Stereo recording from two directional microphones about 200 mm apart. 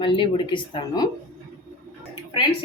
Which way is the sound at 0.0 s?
25° left (ahead or behind).